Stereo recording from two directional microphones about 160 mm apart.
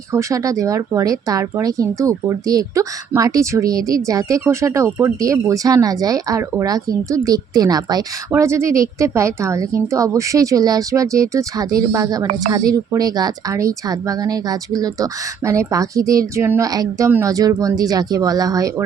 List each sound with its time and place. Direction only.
0.1 s speech: 20° right (ahead or behind)